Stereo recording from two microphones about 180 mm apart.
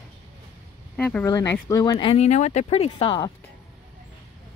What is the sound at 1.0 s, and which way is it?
Speech, 10° left (ahead or behind).